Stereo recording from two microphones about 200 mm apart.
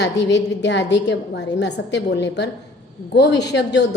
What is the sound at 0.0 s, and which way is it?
A woman's voice, 60° left (ahead or behind).